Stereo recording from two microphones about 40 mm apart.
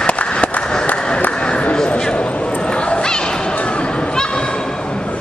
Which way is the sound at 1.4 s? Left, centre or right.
Left.